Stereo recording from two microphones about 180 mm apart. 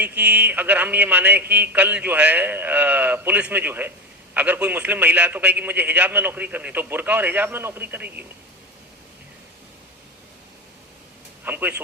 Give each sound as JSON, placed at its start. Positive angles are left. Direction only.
{"t": 0.0, "sound": "a man's voice", "side_deg": -10}
{"t": 11.4, "sound": "a man's voice", "side_deg": -10}